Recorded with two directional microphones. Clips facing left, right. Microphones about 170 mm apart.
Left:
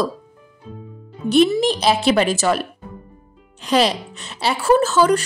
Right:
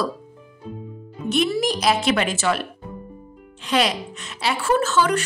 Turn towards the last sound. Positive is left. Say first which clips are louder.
# left 5 dB
turn(degrees=35)  # may be behind; listen again after turning